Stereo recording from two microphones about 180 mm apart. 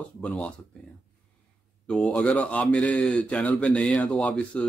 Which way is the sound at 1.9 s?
5° left (ahead or behind).